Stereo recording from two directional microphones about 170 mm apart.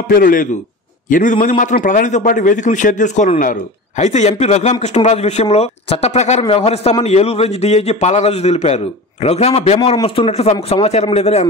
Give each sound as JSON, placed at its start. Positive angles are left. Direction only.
{"t": 0.1, "sound": "a man's voice", "side_deg": 55}